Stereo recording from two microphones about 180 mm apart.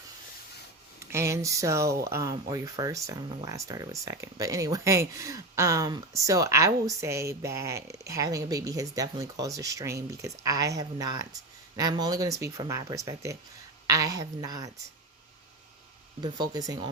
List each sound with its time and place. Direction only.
0.9 s speech: 15° right (ahead or behind)
16.2 s speech: 25° right (ahead or behind)